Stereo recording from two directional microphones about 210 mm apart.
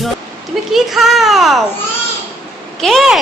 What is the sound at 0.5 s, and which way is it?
Speech, centre (ahead or behind).